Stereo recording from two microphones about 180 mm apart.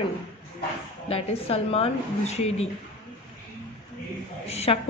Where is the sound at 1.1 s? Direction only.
35° left (ahead or behind).